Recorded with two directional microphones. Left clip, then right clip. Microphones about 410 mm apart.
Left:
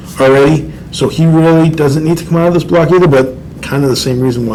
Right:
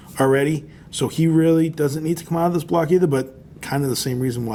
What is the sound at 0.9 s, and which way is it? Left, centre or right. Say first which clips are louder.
A man's voice: left 8 dB; right.